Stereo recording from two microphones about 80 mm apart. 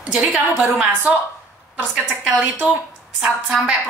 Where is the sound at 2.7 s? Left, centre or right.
Centre.